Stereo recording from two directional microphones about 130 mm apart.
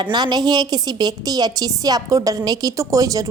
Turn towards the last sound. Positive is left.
turn(degrees=-25)  # may be behind; listen again after turning